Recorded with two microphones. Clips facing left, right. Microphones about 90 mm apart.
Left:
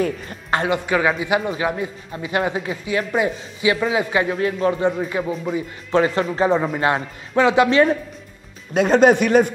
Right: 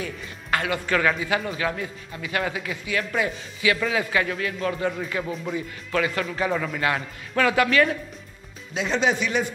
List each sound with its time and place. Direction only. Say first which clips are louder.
0.0 s speech: left 10 dB; 45° left (ahead or behind)
0.5 s music: left 5 dB; 30° left (ahead or behind)
0.7 s a man's voice: left 3 dB; 15° left (ahead or behind)
5.2 s speech: left 5 dB; 5° left (ahead or behind)
5.9 s a man's voice: left 7 dB; 30° left (ahead or behind)
8.7 s speech: left 10 dB; 50° left (ahead or behind)